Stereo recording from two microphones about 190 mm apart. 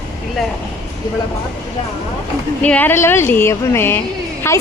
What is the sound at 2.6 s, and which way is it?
A woman's voice, 10° left (ahead or behind).